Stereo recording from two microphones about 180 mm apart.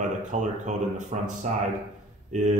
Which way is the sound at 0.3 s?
45° right (ahead or behind).